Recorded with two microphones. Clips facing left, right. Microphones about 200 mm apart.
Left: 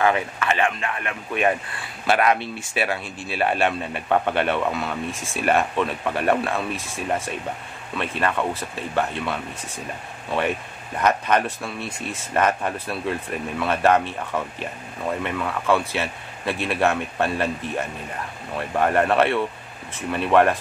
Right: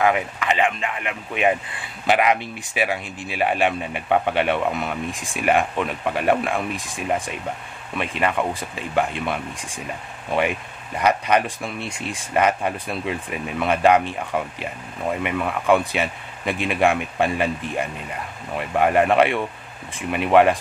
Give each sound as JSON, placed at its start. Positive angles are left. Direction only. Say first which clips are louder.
{"t": 0.0, "sound": "speech", "louder": "right 1 dB", "side_deg": -15}
{"t": 11.0, "sound": "speech", "louder": "right 1 dB", "side_deg": -10}